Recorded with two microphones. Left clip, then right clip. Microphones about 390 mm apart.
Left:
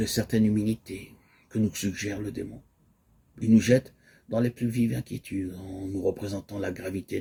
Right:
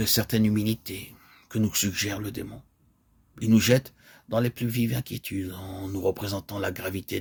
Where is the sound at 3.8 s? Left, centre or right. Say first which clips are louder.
Left 3 dB; right.